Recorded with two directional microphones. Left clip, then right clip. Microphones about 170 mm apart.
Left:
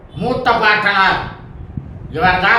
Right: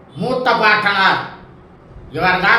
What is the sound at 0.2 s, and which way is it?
Speech, 5° left (ahead or behind).